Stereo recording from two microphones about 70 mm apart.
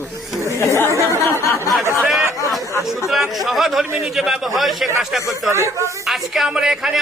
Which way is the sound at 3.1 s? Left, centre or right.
Centre.